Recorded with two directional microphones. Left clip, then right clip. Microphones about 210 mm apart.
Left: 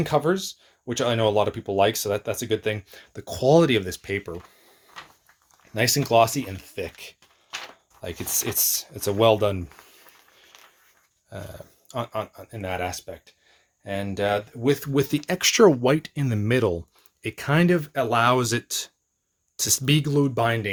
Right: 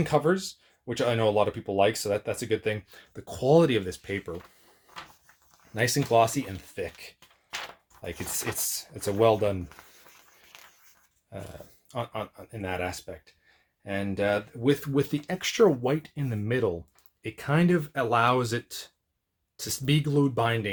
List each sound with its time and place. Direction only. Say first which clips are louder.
0.0 s speech: left 2 dB; 25° left (ahead or behind)
5.7 s speech: left 4 dB; 30° left (ahead or behind)
8.4 s speech: left 9 dB; 30° left (ahead or behind)
10.5 s a sound: right 1 dB; 5° left (ahead or behind)
11.9 s speech: left 4 dB; 30° left (ahead or behind)
15.3 s speech: left 6 dB; 40° left (ahead or behind); by 20.7 s 25° left (ahead or behind)